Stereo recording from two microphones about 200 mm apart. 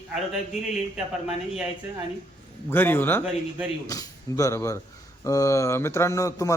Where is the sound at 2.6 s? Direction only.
10° left (ahead or behind).